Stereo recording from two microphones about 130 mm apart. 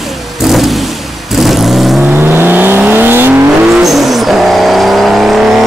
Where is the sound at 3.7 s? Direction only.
Centre (ahead or behind).